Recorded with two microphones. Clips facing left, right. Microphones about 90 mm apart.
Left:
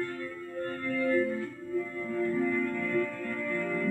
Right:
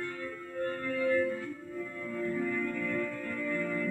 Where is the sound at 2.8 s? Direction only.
45° left (ahead or behind).